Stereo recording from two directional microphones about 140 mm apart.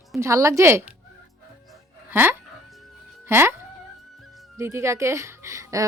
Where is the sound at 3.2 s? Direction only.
15° right (ahead or behind).